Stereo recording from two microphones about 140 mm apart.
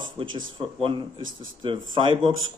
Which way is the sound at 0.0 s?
35° right (ahead or behind).